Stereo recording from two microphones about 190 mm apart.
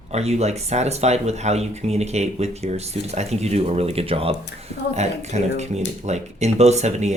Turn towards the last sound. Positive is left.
turn(degrees=-35)  # may be behind; listen again after turning